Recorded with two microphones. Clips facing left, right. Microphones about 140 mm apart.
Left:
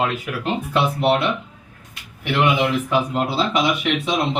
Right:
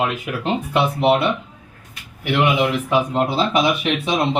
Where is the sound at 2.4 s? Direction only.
15° right (ahead or behind).